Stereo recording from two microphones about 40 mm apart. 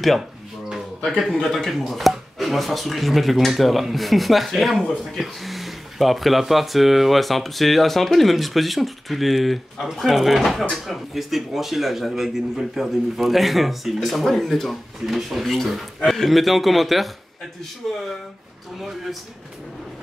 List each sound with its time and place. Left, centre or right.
1.3 s speech: centre